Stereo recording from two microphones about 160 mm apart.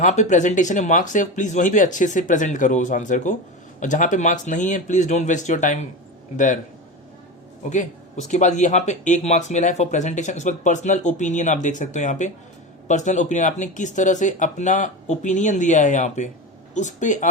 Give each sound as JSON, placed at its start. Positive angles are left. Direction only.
{"t": 0.0, "sound": "speech", "side_deg": 50}
{"t": 7.7, "sound": "speech", "side_deg": 50}